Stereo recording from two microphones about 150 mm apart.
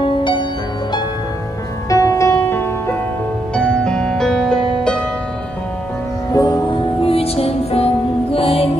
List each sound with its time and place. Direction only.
0.0 s music: 35° left (ahead or behind)
1.9 s music: 20° left (ahead or behind); by 5.0 s 5° left (ahead or behind)
6.3 s music: 25° left (ahead or behind)
7.0 s music: 40° left (ahead or behind)